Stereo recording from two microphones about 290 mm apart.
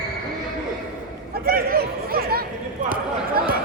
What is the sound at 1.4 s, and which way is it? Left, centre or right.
Chatter, right.